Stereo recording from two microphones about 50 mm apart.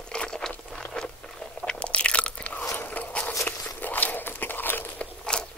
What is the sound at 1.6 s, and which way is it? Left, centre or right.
Crunch, left.